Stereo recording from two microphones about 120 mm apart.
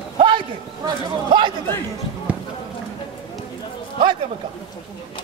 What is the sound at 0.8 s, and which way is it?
Speech, 40° right (ahead or behind).